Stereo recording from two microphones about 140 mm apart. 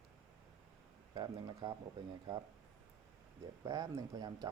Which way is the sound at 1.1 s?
30° right (ahead or behind).